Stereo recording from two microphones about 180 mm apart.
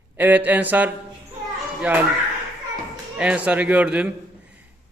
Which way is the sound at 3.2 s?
5° right (ahead or behind).